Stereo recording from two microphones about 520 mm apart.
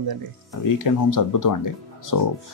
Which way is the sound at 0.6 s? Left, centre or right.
Left.